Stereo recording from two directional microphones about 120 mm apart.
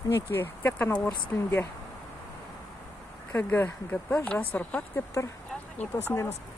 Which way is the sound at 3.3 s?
15° left (ahead or behind).